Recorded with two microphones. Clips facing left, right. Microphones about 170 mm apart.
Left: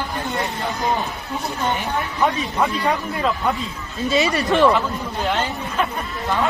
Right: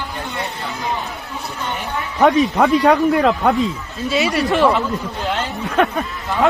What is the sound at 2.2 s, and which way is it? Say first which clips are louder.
Speech: right 8 dB; 70° right (ahead or behind).